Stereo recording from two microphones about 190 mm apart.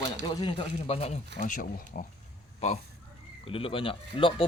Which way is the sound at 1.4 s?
45° left (ahead or behind).